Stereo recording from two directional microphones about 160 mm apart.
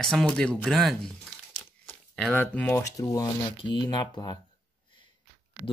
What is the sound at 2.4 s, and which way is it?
Speech, 15° left (ahead or behind).